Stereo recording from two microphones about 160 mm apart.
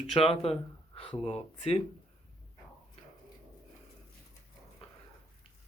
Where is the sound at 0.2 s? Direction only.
40° left (ahead or behind).